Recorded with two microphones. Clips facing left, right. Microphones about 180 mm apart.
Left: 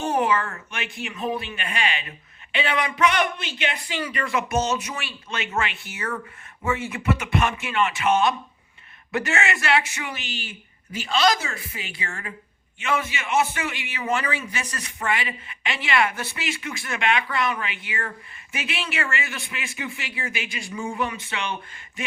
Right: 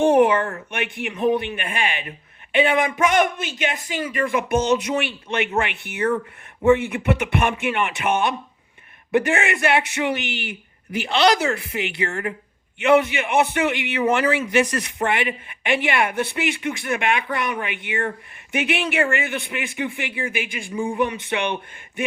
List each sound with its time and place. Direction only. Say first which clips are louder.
0.7 s speech: right 6 dB; 60° right (ahead or behind)